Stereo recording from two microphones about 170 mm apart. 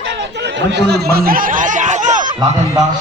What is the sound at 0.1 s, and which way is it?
Snicker, 90° right.